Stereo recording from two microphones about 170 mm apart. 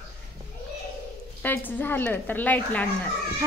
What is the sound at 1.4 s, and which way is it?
A woman's voice, 10° left (ahead or behind).